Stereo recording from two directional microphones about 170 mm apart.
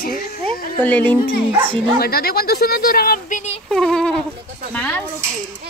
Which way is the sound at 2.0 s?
65° left (ahead or behind).